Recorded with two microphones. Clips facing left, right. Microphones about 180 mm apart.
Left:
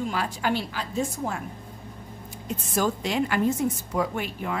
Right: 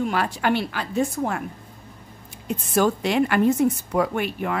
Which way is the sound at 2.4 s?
65° right (ahead or behind).